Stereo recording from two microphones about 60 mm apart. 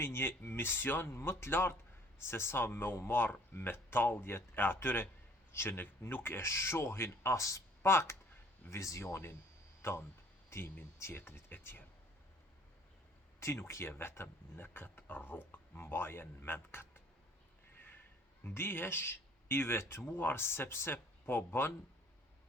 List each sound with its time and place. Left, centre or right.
0.0 s speech: left
7.3 s speech: left
7.9 s speech: left
8.7 s speech: left
10.5 s speech: left
13.4 s speech: left
18.4 s speech: left